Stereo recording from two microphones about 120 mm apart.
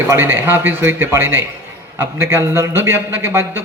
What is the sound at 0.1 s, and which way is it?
A man's voice, 20° right (ahead or behind).